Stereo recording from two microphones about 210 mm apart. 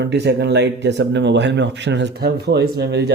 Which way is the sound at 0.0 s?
55° right (ahead or behind).